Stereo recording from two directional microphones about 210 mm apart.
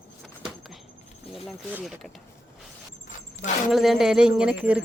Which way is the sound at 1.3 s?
Centre (ahead or behind).